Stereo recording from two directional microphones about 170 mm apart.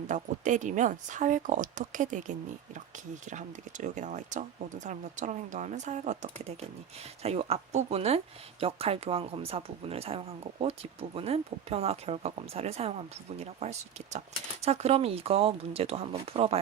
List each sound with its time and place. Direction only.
0.1 s speech: 45° right (ahead or behind)